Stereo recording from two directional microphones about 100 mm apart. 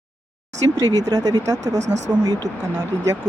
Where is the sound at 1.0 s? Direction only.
40° right (ahead or behind).